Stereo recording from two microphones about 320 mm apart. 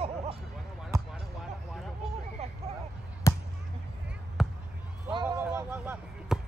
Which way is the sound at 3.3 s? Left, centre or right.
Centre.